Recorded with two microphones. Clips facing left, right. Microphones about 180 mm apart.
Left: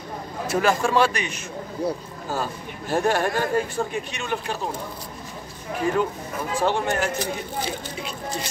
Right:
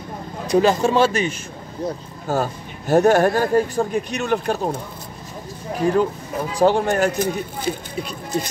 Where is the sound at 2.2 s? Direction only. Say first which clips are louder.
Right 6 dB; 45° right (ahead or behind).